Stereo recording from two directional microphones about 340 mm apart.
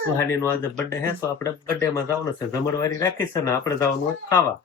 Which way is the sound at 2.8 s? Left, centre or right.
Centre.